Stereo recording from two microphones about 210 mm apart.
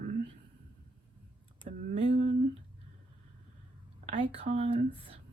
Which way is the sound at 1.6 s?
35° right (ahead or behind).